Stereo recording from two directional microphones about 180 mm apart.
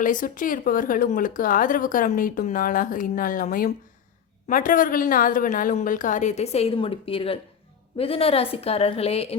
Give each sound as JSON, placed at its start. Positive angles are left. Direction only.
{"t": 0.0, "sound": "a woman's voice", "side_deg": 45}